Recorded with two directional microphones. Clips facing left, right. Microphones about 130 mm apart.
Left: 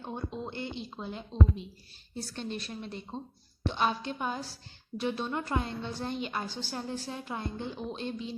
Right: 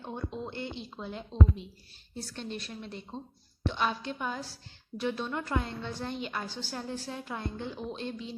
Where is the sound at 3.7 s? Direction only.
25° left (ahead or behind).